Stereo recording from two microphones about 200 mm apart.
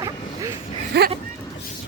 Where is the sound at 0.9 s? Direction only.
55° right (ahead or behind).